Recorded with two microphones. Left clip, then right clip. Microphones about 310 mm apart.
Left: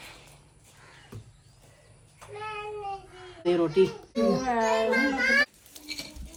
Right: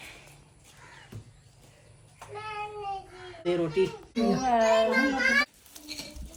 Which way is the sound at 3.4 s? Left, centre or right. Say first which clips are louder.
Left 4 dB; left.